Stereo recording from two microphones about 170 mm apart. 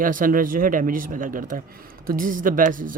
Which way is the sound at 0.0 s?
50° right (ahead or behind).